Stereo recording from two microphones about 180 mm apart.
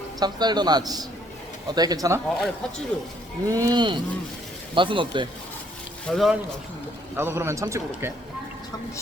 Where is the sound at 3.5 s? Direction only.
20° right (ahead or behind).